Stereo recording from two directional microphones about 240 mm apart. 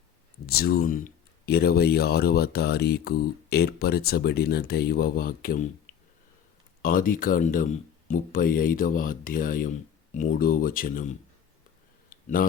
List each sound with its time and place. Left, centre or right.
0.4 s speech: left
6.8 s speech: left
12.0 s a sound: left